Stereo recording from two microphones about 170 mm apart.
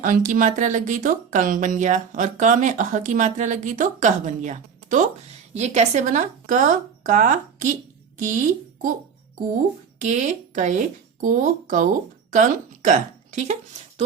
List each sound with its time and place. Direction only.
0.0 s speech: 50° right (ahead or behind)
10.0 s a woman's voice: 45° right (ahead or behind)